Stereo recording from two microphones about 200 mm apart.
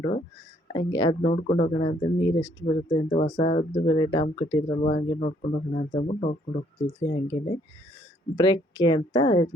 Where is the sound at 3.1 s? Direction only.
35° left (ahead or behind).